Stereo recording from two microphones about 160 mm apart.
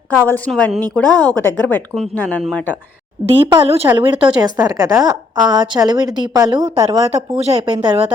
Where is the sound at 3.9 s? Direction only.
20° right (ahead or behind).